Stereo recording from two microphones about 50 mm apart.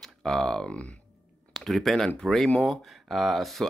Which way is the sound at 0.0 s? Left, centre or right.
Centre.